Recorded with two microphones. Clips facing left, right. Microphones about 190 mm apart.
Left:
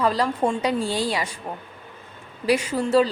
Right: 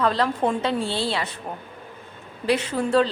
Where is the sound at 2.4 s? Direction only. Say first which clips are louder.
Left 1 dB; 10° left (ahead or behind).